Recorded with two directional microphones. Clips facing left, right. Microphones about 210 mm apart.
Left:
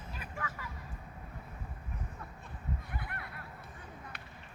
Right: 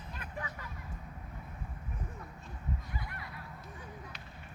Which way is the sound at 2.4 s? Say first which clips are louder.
Even; 60° left (ahead or behind).